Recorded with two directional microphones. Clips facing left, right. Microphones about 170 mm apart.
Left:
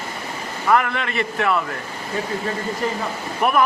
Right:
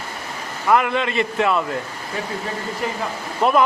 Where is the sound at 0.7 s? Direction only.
20° right (ahead or behind).